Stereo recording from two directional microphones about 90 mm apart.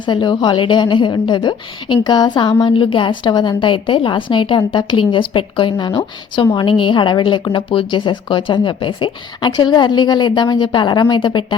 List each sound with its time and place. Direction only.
0.0 s a woman's voice: 60° left (ahead or behind)